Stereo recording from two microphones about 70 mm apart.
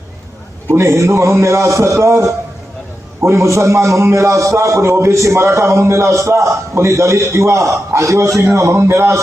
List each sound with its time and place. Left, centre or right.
0.7 s a man's voice: right